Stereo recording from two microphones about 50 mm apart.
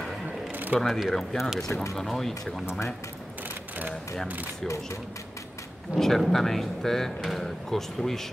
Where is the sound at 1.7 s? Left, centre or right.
Left.